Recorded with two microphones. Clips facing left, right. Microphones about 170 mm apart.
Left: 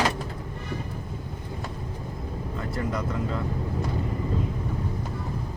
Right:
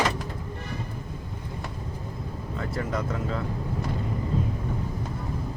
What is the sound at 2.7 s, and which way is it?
Speech, centre (ahead or behind).